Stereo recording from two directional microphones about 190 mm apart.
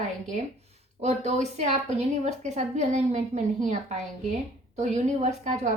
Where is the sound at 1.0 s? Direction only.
35° right (ahead or behind).